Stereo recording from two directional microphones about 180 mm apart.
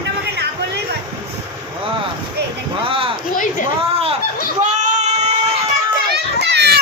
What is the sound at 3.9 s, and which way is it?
Snicker, 30° right (ahead or behind).